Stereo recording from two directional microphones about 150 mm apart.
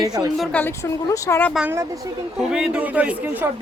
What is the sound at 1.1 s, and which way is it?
Speech, 20° left (ahead or behind).